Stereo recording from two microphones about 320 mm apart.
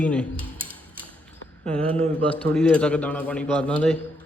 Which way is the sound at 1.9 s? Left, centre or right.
Centre.